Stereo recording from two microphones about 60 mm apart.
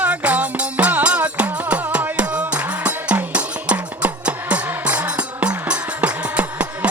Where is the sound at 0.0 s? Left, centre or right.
Right.